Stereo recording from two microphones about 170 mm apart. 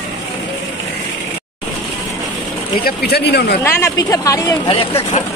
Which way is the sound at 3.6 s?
15° left (ahead or behind).